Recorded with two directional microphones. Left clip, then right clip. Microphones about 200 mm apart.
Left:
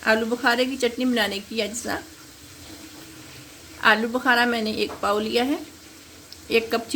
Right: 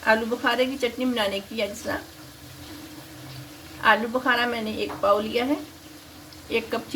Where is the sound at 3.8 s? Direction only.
45° left (ahead or behind).